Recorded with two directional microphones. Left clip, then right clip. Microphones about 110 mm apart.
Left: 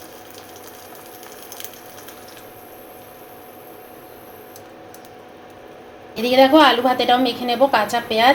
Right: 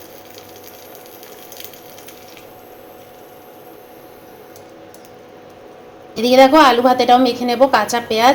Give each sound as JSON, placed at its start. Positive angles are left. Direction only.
{"t": 6.1, "sound": "a woman's voice", "side_deg": -25}